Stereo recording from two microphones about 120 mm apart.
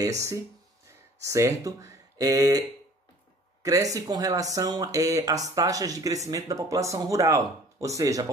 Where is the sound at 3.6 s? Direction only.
30° right (ahead or behind).